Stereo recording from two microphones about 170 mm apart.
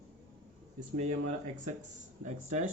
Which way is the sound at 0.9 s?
45° right (ahead or behind).